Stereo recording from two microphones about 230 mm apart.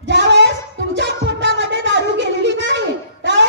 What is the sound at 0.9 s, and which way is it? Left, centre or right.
Music, right.